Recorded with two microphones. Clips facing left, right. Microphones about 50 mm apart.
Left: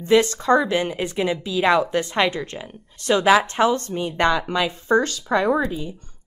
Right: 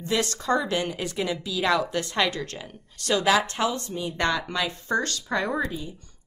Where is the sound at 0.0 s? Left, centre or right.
Left.